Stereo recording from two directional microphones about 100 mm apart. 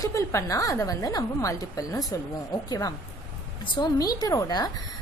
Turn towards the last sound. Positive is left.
turn(degrees=40)  # may be behind; listen again after turning